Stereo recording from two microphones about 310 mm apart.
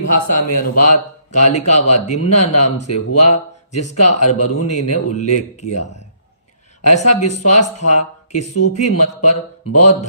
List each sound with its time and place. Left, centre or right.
0.1 s a man's voice: left
7.1 s speech: left